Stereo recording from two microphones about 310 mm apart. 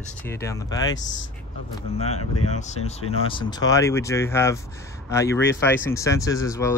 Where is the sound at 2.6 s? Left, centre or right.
Left.